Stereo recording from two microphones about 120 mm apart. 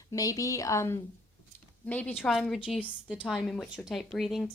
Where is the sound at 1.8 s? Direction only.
15° left (ahead or behind).